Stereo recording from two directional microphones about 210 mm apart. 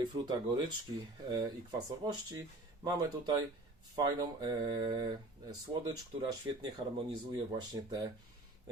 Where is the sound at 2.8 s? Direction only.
20° right (ahead or behind).